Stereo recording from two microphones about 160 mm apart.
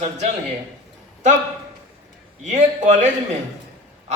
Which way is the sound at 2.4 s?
50° right (ahead or behind).